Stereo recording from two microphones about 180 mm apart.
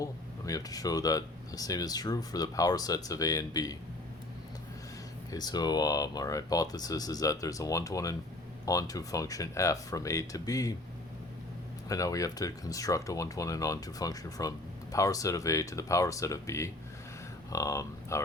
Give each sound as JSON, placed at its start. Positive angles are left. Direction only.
{"t": 0.0, "sound": "speech", "side_deg": 20}
{"t": 5.3, "sound": "speech", "side_deg": 20}
{"t": 11.9, "sound": "speech", "side_deg": 20}